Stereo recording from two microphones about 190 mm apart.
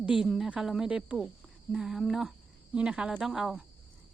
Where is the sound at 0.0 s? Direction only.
5° right (ahead or behind).